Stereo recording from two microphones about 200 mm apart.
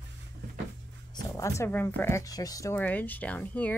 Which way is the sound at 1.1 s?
15° left (ahead or behind).